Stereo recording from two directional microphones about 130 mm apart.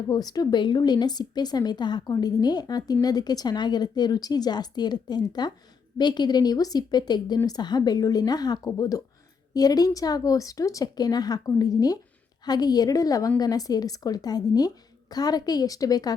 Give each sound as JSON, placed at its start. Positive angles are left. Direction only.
{"t": 0.1, "sound": "a woman's voice", "side_deg": 30}